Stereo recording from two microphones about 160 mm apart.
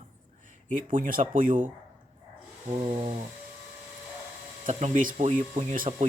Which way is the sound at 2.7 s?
40° right (ahead or behind).